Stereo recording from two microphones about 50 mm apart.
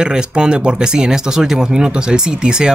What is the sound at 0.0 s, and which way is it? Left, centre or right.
Speech, centre.